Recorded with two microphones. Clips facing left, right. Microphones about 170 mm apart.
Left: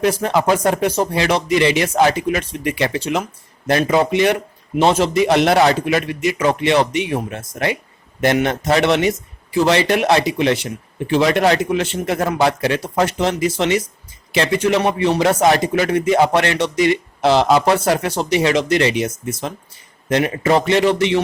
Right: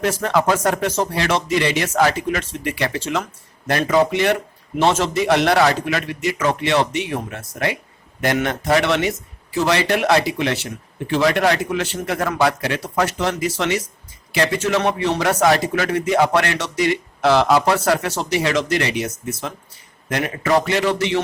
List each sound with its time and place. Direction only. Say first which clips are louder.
0.0 s speech: left 2 dB; 15° left (ahead or behind)